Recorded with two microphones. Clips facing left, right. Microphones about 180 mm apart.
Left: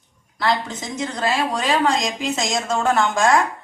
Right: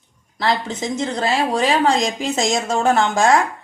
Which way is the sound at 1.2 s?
30° right (ahead or behind).